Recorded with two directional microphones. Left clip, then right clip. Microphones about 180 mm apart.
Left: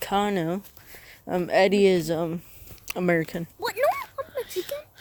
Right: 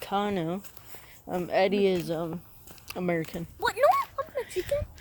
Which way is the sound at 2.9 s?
50° left (ahead or behind).